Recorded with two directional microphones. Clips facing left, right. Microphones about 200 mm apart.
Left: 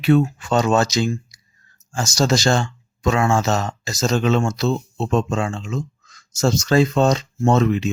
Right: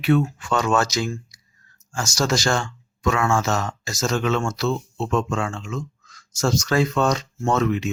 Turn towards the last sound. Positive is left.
turn(degrees=30)  # may be behind; listen again after turning